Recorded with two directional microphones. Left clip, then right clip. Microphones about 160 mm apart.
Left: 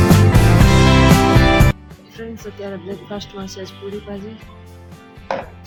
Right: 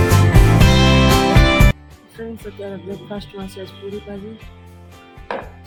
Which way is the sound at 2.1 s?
Centre (ahead or behind).